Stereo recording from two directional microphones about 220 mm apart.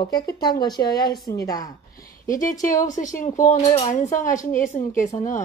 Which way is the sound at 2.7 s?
35° left (ahead or behind).